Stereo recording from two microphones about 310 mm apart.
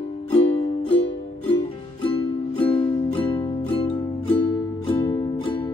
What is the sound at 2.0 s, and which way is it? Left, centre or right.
Music, centre.